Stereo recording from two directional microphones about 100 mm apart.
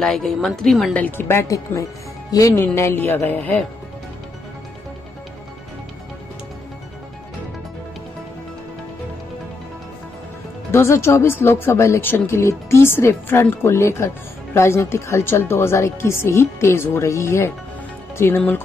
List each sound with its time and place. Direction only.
0.0 s a woman's voice: centre (ahead or behind)
0.9 s speech: 20° left (ahead or behind); by 2.6 s 35° left (ahead or behind)
2.6 s speech: 25° left (ahead or behind)
10.7 s speech: 25° left (ahead or behind)